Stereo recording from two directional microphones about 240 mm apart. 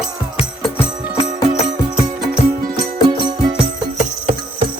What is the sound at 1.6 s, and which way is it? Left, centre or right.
Music, left.